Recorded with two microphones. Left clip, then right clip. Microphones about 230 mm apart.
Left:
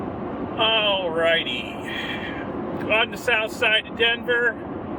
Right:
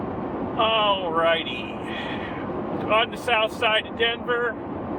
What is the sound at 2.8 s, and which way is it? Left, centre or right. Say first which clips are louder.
Speech: left 1 dB; left.